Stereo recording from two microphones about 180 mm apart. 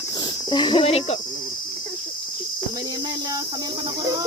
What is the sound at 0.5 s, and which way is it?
Speech, 25° left (ahead or behind).